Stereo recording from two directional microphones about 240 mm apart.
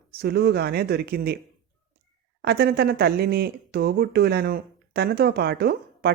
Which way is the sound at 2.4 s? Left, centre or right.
Right.